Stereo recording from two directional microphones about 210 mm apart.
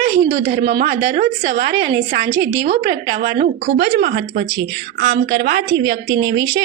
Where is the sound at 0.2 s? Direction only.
40° right (ahead or behind).